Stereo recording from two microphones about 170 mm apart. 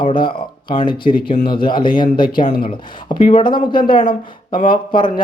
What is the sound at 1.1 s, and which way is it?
Speech, 60° left (ahead or behind).